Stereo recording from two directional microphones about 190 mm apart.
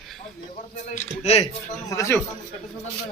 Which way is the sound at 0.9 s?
35° left (ahead or behind).